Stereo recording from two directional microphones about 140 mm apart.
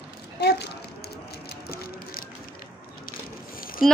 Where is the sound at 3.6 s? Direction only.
90° left.